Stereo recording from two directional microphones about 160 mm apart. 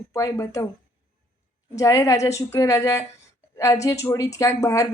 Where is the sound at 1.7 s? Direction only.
20° left (ahead or behind).